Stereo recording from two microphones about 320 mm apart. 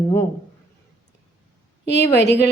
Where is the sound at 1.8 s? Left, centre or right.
Left.